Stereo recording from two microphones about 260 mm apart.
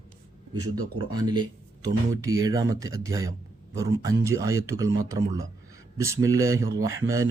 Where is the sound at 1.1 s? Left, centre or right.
Centre.